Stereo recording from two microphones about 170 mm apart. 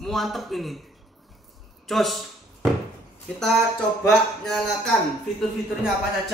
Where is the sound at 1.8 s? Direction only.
Centre (ahead or behind).